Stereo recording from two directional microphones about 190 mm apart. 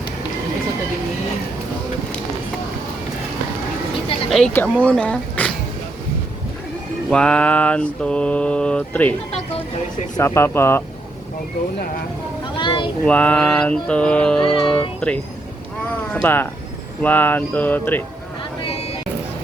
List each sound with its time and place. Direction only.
4.3 s speech: centre (ahead or behind)
4.5 s mantra: 10° left (ahead or behind)
7.1 s mantra: 5° left (ahead or behind)
9.3 s music: 35° left (ahead or behind)
10.2 s mantra: 15° left (ahead or behind)
12.5 s a sound: 25° left (ahead or behind)
13.1 s mantra: 5° left (ahead or behind)
14.4 s music: 25° left (ahead or behind)
16.2 s mantra: 10° left (ahead or behind)